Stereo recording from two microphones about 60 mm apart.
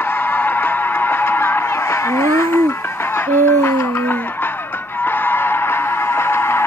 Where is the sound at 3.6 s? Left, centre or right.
Left.